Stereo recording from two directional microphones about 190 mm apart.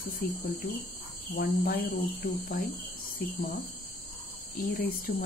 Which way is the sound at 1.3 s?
50° left (ahead or behind).